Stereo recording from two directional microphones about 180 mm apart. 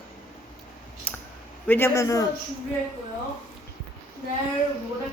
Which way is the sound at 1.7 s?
15° left (ahead or behind).